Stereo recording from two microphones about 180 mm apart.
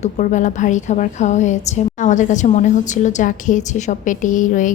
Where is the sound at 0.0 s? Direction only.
45° left (ahead or behind).